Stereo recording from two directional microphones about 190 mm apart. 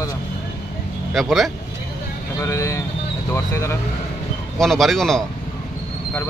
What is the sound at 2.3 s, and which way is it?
Speech, 15° left (ahead or behind).